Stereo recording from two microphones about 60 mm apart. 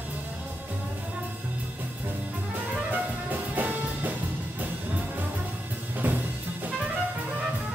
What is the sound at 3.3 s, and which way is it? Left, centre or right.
Music, right.